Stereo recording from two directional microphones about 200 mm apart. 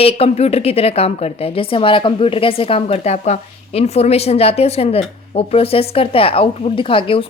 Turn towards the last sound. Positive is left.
turn(degrees=25)  # may be behind; listen again after turning